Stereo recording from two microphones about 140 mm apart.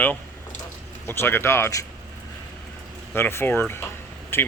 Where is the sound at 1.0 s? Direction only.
15° left (ahead or behind).